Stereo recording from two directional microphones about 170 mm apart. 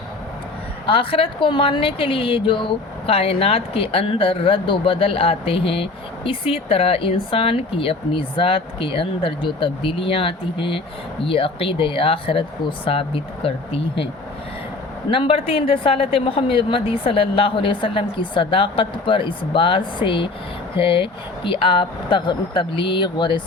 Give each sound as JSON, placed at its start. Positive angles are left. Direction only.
{"t": 0.9, "sound": "a woman's voice", "side_deg": 30}
{"t": 15.1, "sound": "a woman's voice", "side_deg": 30}